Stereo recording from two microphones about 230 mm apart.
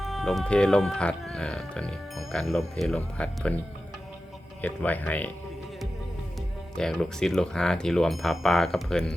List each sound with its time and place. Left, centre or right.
0.0 s speech: centre
4.6 s speech: centre
6.7 s speech: centre